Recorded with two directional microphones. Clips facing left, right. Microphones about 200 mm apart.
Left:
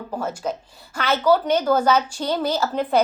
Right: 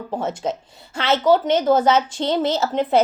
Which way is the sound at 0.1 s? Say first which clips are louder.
Right 2 dB; 25° right (ahead or behind).